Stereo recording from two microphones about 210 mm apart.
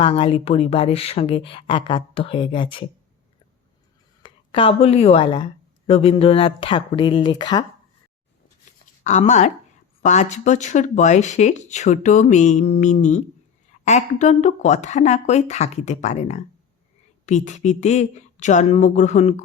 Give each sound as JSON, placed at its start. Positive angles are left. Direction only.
{"t": 0.0, "sound": "speech", "side_deg": 25}
{"t": 4.2, "sound": "speech", "side_deg": 25}
{"t": 9.0, "sound": "speech", "side_deg": 35}